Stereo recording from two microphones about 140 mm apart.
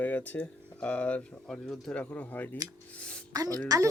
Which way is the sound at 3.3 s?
25° right (ahead or behind).